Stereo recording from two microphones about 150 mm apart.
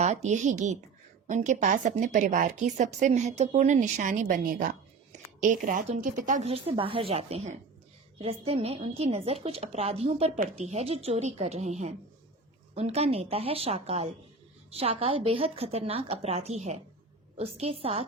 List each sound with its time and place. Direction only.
0.0 s a woman's voice: 50° right (ahead or behind); by 4.8 s 70° right (ahead or behind)
5.4 s a woman's voice: 60° right (ahead or behind)
6.5 s a woman's voice: 40° right (ahead or behind)